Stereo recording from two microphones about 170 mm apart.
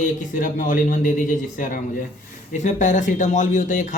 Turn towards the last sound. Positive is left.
turn(degrees=50)  # may be behind; listen again after turning